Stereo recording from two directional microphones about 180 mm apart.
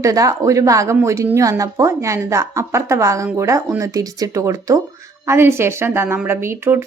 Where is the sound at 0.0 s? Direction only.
20° right (ahead or behind).